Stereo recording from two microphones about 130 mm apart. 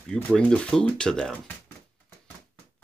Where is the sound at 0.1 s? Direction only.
5° left (ahead or behind).